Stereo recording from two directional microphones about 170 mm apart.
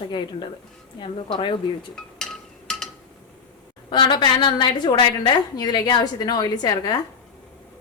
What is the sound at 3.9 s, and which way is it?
A woman's voice, 30° left (ahead or behind).